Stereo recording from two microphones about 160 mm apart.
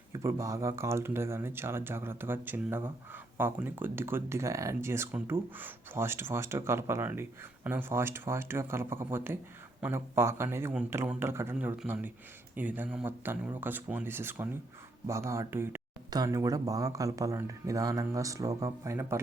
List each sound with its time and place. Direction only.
0.1 s speech: 20° right (ahead or behind)